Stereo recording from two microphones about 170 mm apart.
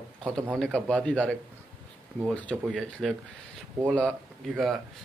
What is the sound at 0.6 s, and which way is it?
Speech, 5° left (ahead or behind).